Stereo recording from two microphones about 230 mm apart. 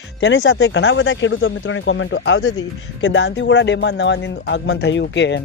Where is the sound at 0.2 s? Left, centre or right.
Left.